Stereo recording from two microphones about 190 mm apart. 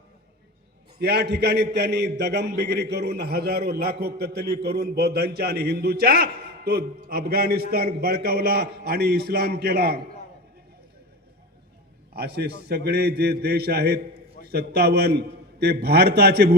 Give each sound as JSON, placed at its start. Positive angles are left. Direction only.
{"t": 0.9, "sound": "a man's voice", "side_deg": -60}
{"t": 12.1, "sound": "a man's voice", "side_deg": -60}